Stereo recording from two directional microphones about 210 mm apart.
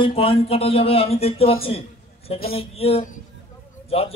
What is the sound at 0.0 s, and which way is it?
Speech, 25° left (ahead or behind).